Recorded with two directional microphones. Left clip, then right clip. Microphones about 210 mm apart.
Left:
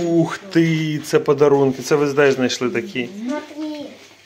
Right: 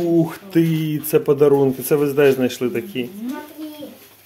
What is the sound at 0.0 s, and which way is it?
Music, centre (ahead or behind).